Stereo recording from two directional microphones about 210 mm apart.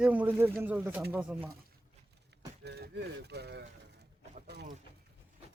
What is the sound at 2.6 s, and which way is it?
Speech, 50° right (ahead or behind).